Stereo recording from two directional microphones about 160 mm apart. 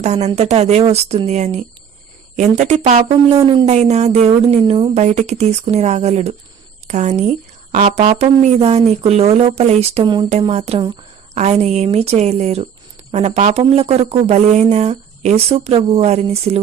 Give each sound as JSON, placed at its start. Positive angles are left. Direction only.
{"t": 0.0, "sound": "speech", "side_deg": -45}
{"t": 3.3, "sound": "speech", "side_deg": -30}
{"t": 3.7, "sound": "speech", "side_deg": -45}
{"t": 10.0, "sound": "speech", "side_deg": -30}
{"t": 10.2, "sound": "speech", "side_deg": -40}